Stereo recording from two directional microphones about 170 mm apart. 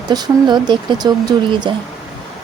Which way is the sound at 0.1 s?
25° right (ahead or behind).